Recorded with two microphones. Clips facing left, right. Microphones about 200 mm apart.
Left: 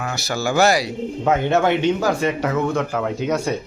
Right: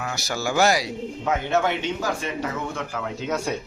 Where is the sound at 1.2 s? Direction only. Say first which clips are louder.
Left 5 dB; 65° left (ahead or behind).